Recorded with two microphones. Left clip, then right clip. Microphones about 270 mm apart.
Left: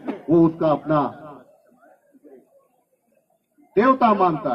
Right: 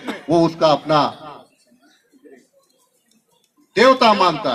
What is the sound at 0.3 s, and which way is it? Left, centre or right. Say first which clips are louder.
Speech: right 3 dB; right.